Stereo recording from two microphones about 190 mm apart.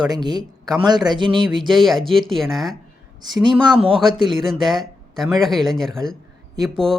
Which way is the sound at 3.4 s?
30° right (ahead or behind).